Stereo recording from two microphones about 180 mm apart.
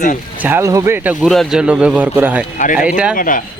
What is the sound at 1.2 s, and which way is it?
Speech, centre (ahead or behind).